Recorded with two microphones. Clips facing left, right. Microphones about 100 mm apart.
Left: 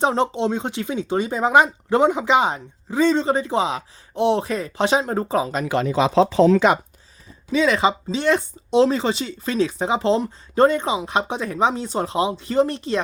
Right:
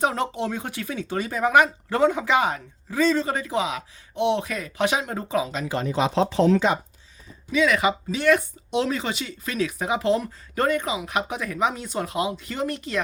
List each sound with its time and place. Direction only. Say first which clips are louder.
0.0 s speech: left 5 dB; 25° left (ahead or behind)
5.6 s speech: left 4 dB; 75° left (ahead or behind)
7.5 s speech: left 3 dB; 30° left (ahead or behind)